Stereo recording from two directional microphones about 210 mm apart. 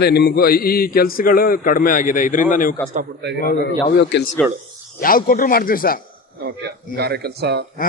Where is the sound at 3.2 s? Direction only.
55° right (ahead or behind).